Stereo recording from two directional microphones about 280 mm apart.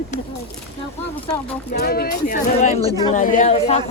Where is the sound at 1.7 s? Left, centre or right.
Left.